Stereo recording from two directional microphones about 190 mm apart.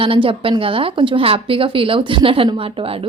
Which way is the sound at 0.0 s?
30° right (ahead or behind).